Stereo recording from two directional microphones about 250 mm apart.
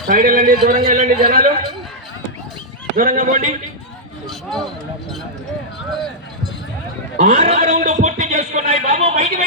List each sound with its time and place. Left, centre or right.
0.1 s a man's voice: right
2.9 s a man's voice: right
4.3 s a sound: centre
7.2 s speech: right